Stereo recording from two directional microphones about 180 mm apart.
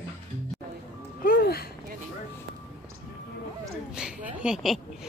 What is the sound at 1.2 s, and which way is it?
Music, 55° left (ahead or behind).